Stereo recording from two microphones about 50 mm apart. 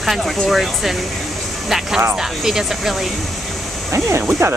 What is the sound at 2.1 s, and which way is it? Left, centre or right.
Speech, centre.